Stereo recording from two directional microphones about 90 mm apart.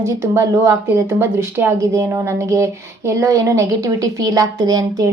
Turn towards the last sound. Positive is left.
turn(degrees=-45)  # may be behind; listen again after turning